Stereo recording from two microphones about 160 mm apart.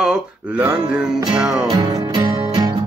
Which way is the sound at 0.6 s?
10° right (ahead or behind).